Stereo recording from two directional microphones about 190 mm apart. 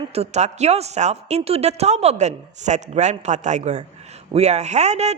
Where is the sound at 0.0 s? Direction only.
30° right (ahead or behind).